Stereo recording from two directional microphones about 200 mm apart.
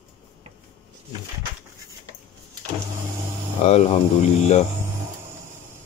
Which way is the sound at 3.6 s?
30° left (ahead or behind).